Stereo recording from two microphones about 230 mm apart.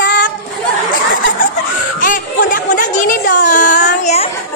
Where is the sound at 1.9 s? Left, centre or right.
Left.